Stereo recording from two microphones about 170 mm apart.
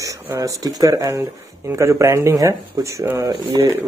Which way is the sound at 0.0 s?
20° right (ahead or behind).